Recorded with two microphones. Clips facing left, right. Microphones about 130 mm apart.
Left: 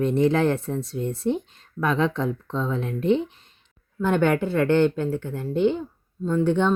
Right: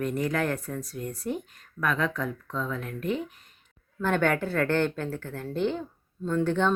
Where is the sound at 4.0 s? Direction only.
15° left (ahead or behind).